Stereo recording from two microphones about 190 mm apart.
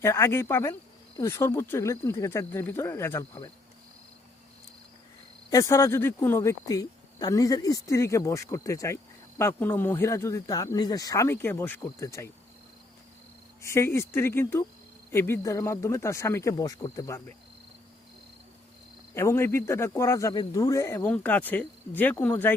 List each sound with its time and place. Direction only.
0.0 s speech: 15° left (ahead or behind)
5.5 s speech: 15° left (ahead or behind)
13.6 s speech: 15° left (ahead or behind)
19.1 s speech: 15° left (ahead or behind)